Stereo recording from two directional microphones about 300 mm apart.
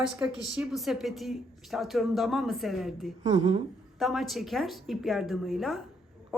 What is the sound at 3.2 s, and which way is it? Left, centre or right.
Speech, right.